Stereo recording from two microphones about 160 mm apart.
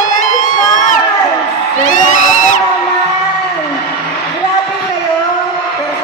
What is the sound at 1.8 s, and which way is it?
Crowd, 55° left (ahead or behind).